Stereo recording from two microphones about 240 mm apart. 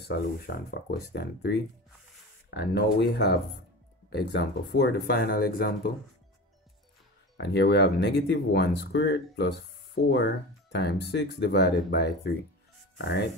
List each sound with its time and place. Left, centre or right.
0.1 s speech: left
7.3 s speech: left